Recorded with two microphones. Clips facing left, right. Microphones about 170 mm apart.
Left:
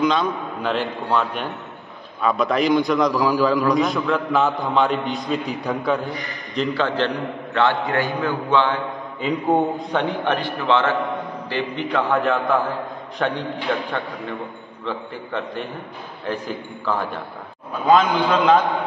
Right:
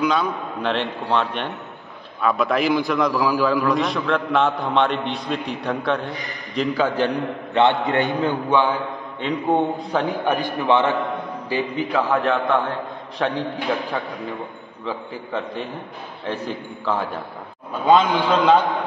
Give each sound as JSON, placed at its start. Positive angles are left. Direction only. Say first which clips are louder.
{"t": 0.0, "sound": "a man's voice", "louder": "left 1 dB", "side_deg": -5}
{"t": 7.5, "sound": "a man's voice", "louder": "right 2 dB", "side_deg": -25}
{"t": 9.2, "sound": "a man's voice", "louder": "left 1 dB", "side_deg": 5}
{"t": 10.2, "sound": "a man's voice", "louder": "right 1 dB", "side_deg": -10}
{"t": 16.3, "sound": "a man's voice", "louder": "even", "side_deg": 0}